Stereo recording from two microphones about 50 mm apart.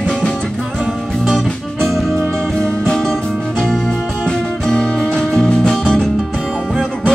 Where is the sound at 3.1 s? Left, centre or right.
Centre.